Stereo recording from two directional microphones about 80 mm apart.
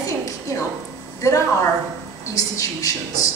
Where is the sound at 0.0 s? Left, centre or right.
Left.